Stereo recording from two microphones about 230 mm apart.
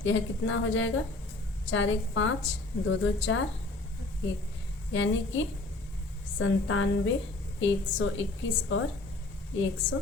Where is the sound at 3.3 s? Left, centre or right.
Left.